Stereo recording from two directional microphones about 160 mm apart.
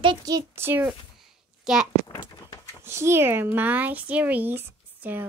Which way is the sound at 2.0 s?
30° left (ahead or behind).